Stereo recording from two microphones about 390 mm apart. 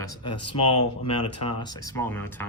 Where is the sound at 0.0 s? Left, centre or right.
Centre.